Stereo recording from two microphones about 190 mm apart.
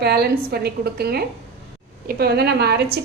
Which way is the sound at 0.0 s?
55° right (ahead or behind).